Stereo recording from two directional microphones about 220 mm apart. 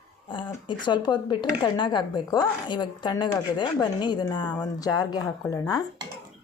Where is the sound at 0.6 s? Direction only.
20° left (ahead or behind).